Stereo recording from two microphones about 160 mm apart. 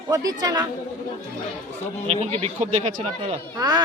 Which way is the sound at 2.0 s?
40° right (ahead or behind).